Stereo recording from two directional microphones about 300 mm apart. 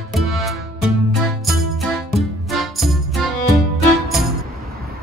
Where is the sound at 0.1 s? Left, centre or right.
Centre.